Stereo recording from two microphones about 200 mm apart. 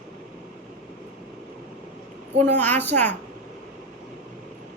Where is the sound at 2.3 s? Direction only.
10° left (ahead or behind).